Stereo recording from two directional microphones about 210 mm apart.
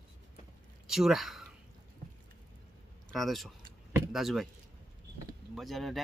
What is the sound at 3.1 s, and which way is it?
Speech, centre (ahead or behind).